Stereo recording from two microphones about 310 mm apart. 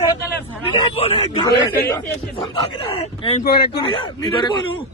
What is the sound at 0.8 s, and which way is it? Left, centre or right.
Speech, centre.